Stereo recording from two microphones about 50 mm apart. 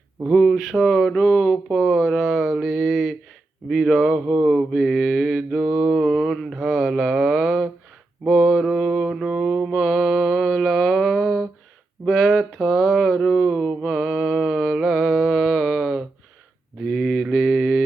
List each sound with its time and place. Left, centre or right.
0.3 s mantra: centre
4.1 s mantra: centre
5.9 s mantra: centre
12.0 s a sound: centre
16.8 s mantra: centre